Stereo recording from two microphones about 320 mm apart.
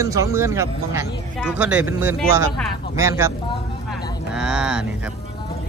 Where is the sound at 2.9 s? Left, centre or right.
Centre.